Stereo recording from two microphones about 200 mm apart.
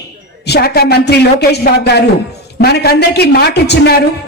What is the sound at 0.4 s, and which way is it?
A man's voice, 55° left (ahead or behind).